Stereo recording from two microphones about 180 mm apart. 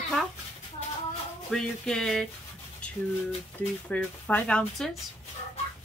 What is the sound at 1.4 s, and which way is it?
Speech, 5° left (ahead or behind).